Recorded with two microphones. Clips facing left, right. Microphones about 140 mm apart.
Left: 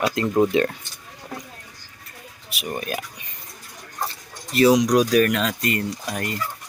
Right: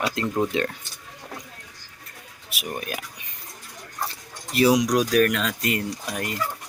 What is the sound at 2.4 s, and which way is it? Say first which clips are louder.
Speech: left 3 dB; centre (ahead or behind).